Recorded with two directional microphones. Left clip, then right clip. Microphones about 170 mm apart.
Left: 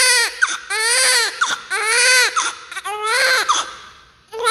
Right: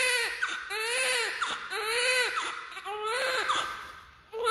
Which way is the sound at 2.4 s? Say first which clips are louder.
Left 12 dB; 30° left (ahead or behind).